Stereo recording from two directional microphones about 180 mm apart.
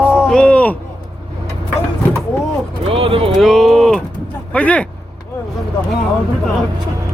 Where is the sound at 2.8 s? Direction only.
30° right (ahead or behind).